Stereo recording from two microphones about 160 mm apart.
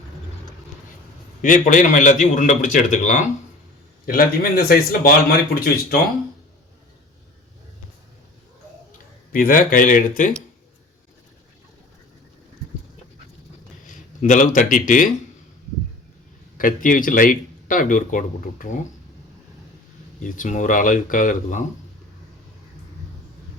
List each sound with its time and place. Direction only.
1.4 s speech: 55° left (ahead or behind)
4.0 s speech: 70° left (ahead or behind)
9.3 s speech: 60° left (ahead or behind)
13.8 s speech: 55° left (ahead or behind)
16.6 s speech: 55° left (ahead or behind)
20.1 s speech: 55° left (ahead or behind)